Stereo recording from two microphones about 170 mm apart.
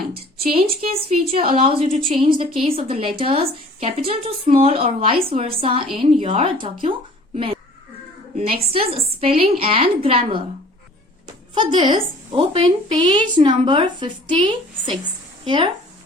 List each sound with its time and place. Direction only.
1.1 s a woman's voice: 35° right (ahead or behind)
11.5 s a woman's voice: 25° right (ahead or behind)